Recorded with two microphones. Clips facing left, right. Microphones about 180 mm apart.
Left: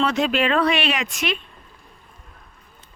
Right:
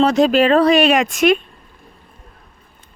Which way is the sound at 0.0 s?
40° right (ahead or behind).